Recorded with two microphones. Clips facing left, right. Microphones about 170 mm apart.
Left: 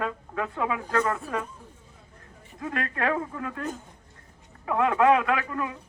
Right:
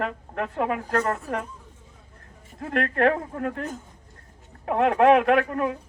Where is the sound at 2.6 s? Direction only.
60° right (ahead or behind).